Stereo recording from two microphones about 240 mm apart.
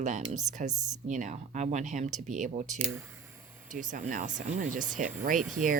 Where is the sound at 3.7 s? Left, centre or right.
Right.